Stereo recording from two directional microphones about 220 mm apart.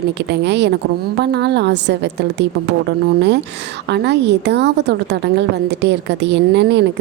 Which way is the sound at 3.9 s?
50° right (ahead or behind).